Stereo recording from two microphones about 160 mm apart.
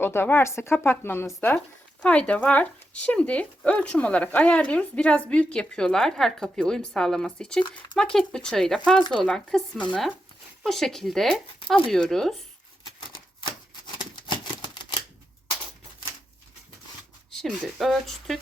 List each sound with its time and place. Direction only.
0.0 s speech: 15° left (ahead or behind)
13.0 s typewriter: 30° left (ahead or behind)
17.3 s speech: centre (ahead or behind)